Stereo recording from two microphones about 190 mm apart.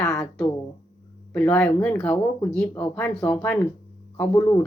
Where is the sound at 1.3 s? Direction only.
5° left (ahead or behind).